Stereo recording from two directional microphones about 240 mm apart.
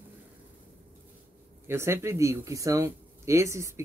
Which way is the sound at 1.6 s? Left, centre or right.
Centre.